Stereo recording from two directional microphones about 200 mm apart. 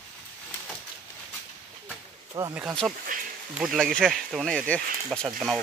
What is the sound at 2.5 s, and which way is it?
Speech, 10° right (ahead or behind).